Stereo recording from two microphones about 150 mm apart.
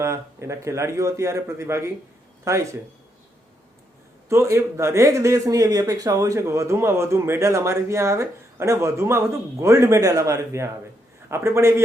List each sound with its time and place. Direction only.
0.0 s a man's voice: 20° right (ahead or behind)
4.3 s a man's voice: 20° right (ahead or behind)